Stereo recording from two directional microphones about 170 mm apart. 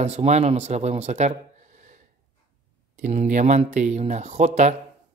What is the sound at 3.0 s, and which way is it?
Speech, 45° right (ahead or behind).